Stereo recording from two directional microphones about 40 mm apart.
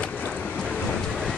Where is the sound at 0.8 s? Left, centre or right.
Centre.